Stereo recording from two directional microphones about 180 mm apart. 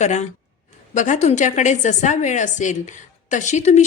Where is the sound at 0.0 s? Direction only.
40° left (ahead or behind).